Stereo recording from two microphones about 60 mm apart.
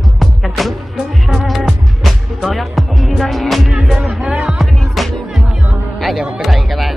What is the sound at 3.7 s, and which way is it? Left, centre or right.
Speech, centre.